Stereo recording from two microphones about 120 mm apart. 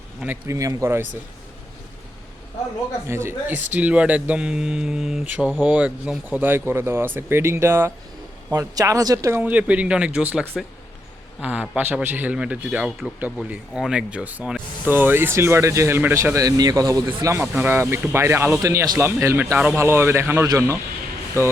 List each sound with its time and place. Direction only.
0.4 s speech: 25° right (ahead or behind)
3.1 s speech: 20° right (ahead or behind)
9.4 s speech: 10° right (ahead or behind); by 17.2 s 35° right (ahead or behind)
17.2 s speech: 25° right (ahead or behind)